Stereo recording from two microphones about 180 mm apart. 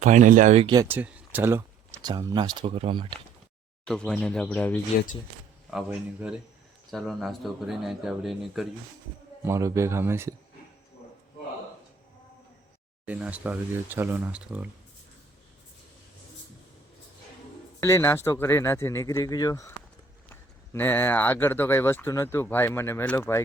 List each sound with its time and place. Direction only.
0.0 s speech: 45° right (ahead or behind)
0.7 s speech: 15° right (ahead or behind)
3.8 s speech: 5° left (ahead or behind)
5.7 s speech: 5° right (ahead or behind)
9.4 s speech: 15° right (ahead or behind)
13.1 s speech: 5° right (ahead or behind)
17.7 s speech: 15° left (ahead or behind)